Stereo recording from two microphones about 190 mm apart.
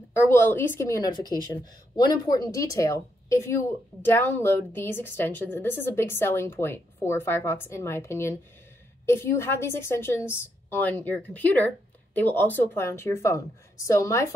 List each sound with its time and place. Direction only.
0.1 s a woman's voice: 10° left (ahead or behind)